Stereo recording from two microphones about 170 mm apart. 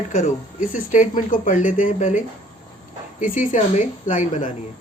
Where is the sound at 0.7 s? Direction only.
50° left (ahead or behind).